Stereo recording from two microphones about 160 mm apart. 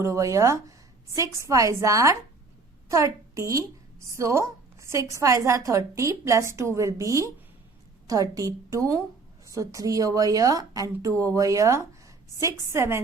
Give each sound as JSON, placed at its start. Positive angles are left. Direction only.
{"t": 0.0, "sound": "a woman's voice", "side_deg": -20}